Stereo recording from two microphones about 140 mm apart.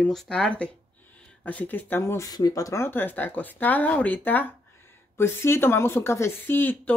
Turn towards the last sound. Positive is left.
turn(degrees=15)  # may be behind; listen again after turning